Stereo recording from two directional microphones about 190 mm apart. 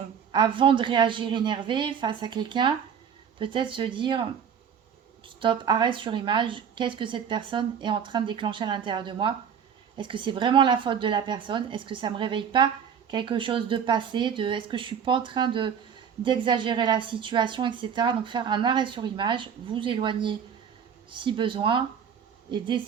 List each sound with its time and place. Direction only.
0.3 s a woman's voice: 25° right (ahead or behind)